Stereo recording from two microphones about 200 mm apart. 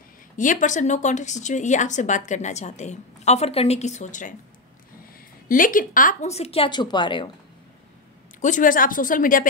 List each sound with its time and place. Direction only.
0.4 s speech: 40° left (ahead or behind)
5.5 s speech: 45° left (ahead or behind); by 7.2 s 25° left (ahead or behind)
8.4 s speech: 40° left (ahead or behind)